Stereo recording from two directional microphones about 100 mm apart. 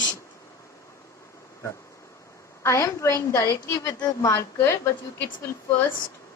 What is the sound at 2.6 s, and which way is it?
A woman's voice, 30° left (ahead or behind).